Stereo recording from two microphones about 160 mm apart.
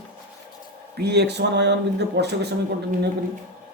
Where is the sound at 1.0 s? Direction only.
90° right.